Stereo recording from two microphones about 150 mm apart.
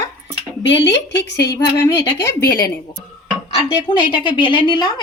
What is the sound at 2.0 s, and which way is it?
Speech, 75° left (ahead or behind).